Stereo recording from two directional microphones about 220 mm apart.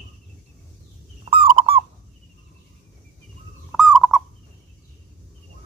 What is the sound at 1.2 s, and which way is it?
Bird, 25° right (ahead or behind).